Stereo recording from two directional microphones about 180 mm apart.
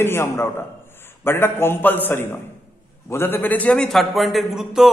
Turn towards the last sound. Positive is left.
turn(degrees=0)  # may be behind; listen again after turning